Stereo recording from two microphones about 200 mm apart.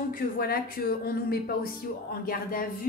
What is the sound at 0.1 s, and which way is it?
A woman's voice, 50° left (ahead or behind).